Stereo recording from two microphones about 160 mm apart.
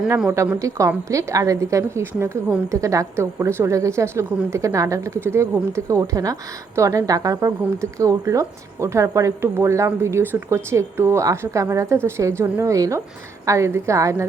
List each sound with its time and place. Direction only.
0.3 s a woman's voice: 15° right (ahead or behind)